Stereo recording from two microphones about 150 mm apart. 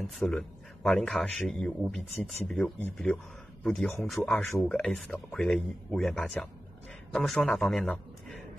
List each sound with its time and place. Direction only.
0.0 s a man's voice: 5° left (ahead or behind)